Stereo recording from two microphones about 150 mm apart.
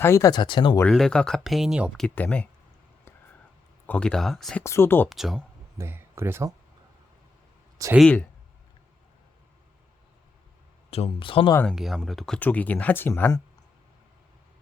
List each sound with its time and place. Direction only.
0.0 s speech: 20° left (ahead or behind)
0.9 s speech: 5° left (ahead or behind)
2.0 s speech: 10° left (ahead or behind)
3.8 s speech: 10° left (ahead or behind)
4.6 s speech: 15° left (ahead or behind)
5.0 s speech: centre (ahead or behind)
5.7 s speech: 15° right (ahead or behind)
7.9 s speech: 5° left (ahead or behind)
10.9 s speech: 40° left (ahead or behind)
11.6 s speech: centre (ahead or behind)